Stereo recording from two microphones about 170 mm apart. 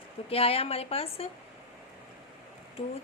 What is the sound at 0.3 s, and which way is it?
A woman's voice, 35° left (ahead or behind).